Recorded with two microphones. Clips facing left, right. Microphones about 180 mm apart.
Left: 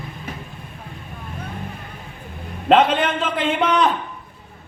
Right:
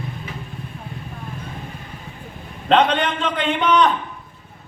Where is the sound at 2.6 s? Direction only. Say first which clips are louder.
Left 1 dB; 5° left (ahead or behind).